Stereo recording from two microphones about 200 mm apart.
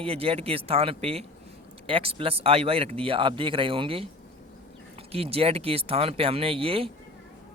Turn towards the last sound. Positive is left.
turn(degrees=-30)  # may be behind; listen again after turning